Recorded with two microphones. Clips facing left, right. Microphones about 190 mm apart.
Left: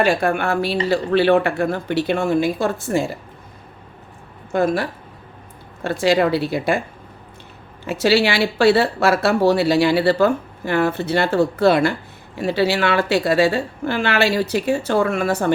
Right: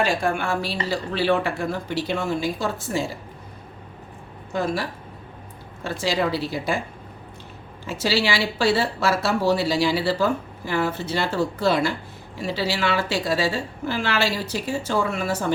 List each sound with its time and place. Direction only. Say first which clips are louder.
0.0 s a woman's voice: left 5 dB; 60° left (ahead or behind)
4.5 s a woman's voice: left 6 dB; 55° left (ahead or behind)
7.9 s a woman's voice: left 6 dB; 65° left (ahead or behind)